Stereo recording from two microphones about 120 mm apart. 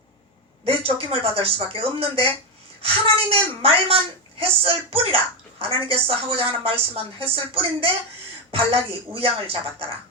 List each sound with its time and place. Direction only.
0.6 s a woman's voice: 50° right (ahead or behind)